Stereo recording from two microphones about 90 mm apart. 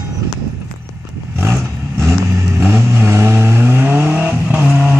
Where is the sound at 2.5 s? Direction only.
25° right (ahead or behind).